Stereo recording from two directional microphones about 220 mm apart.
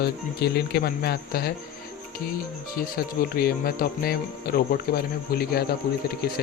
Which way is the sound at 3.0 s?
45° left (ahead or behind).